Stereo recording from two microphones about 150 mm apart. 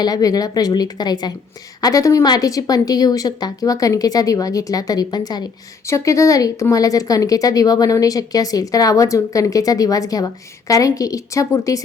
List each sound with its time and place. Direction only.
0.0 s speech: 25° left (ahead or behind)